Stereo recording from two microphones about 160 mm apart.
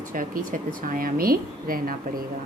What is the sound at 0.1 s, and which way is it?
A woman's voice, 55° right (ahead or behind).